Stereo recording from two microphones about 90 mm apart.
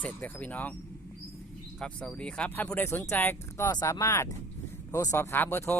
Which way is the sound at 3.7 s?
45° left (ahead or behind).